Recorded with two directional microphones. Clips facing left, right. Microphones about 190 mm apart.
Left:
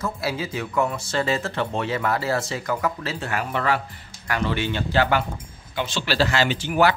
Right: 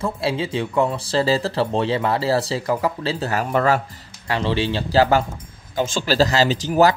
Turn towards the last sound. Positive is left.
turn(degrees=-40)  # may be behind; listen again after turning